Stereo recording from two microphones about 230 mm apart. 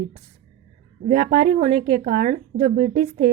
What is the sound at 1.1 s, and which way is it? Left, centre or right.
A woman's voice, right.